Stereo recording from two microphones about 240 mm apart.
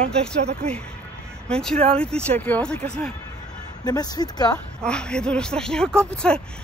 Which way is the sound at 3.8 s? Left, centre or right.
Centre.